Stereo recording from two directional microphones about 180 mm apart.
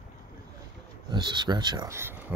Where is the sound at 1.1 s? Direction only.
25° right (ahead or behind).